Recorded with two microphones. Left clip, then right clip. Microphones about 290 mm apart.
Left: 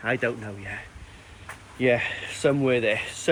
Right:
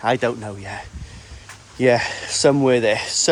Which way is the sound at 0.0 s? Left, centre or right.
Centre.